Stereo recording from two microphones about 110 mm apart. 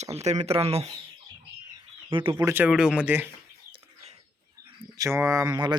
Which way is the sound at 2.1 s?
55° right (ahead or behind).